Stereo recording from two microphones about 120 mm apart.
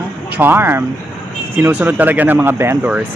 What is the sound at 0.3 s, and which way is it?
Speech, 15° right (ahead or behind).